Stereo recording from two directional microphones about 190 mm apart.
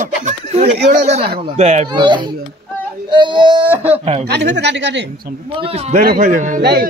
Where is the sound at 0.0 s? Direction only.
40° right (ahead or behind).